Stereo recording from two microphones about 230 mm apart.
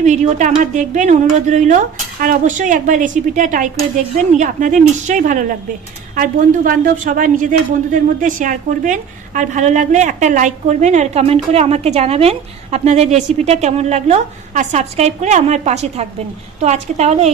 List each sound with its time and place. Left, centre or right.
0.0 s a woman's voice: right